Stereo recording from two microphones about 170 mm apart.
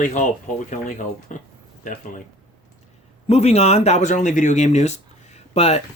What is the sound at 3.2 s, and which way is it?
Speech, 40° left (ahead or behind).